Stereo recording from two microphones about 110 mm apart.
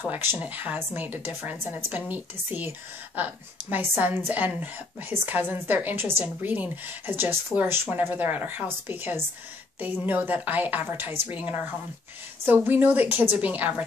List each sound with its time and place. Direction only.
0.0 s a woman's voice: 20° right (ahead or behind)
3.7 s a woman's voice: 20° right (ahead or behind)